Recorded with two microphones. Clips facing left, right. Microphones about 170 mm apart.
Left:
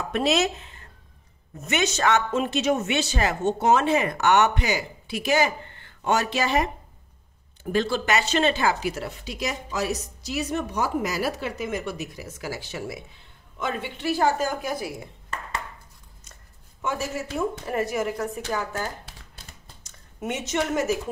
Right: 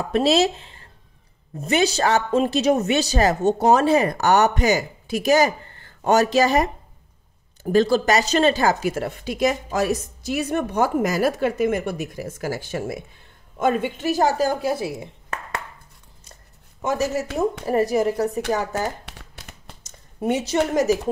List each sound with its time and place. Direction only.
0.1 s speech: 30° right (ahead or behind)
16.8 s speech: 40° right (ahead or behind)
19.0 s crumpling: 70° right (ahead or behind)
19.8 s speech: 35° right (ahead or behind)